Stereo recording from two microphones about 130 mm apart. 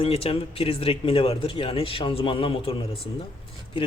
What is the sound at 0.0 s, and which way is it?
Speech, 50° left (ahead or behind).